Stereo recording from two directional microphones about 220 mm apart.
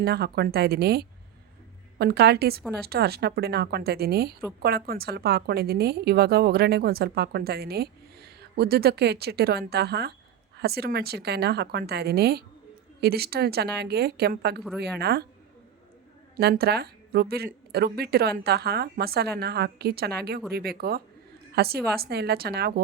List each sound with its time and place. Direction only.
0.0 s a woman's voice: 45° right (ahead or behind)
16.3 s a woman's voice: 45° right (ahead or behind)